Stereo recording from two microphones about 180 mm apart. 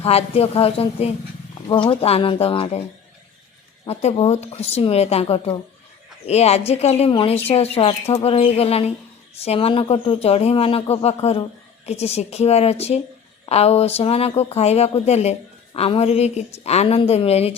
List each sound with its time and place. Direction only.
0.0 s speech: 35° left (ahead or behind)
3.8 s speech: 35° left (ahead or behind)